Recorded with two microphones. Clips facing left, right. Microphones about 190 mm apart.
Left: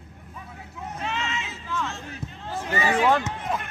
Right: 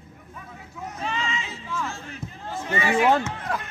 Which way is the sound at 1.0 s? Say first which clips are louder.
Right 1 dB; 5° left (ahead or behind).